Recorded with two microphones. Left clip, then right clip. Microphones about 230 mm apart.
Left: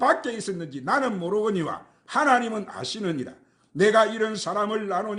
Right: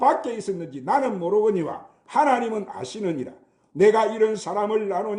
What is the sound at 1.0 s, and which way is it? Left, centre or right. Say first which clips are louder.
Speech: right 3 dB; left.